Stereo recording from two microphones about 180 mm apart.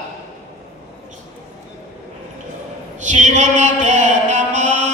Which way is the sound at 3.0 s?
40° right (ahead or behind).